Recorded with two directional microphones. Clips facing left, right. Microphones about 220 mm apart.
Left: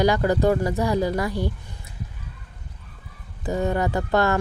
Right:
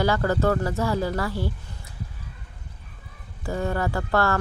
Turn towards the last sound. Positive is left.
turn(degrees=20)  # may be behind; listen again after turning